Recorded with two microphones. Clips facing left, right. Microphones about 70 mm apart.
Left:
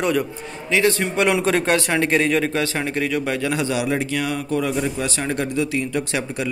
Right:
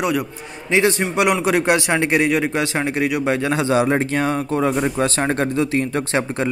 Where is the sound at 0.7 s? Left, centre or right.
Right.